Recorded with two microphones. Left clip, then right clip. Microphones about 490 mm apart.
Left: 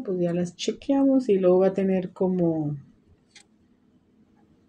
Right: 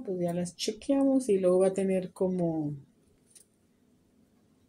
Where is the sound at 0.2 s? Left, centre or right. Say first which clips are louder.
Left 5 dB; right.